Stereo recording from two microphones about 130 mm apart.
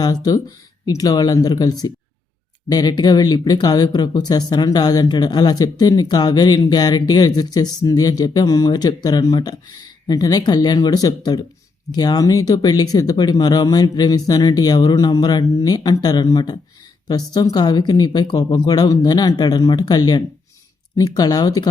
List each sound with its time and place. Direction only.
0.0 s speech: 30° left (ahead or behind)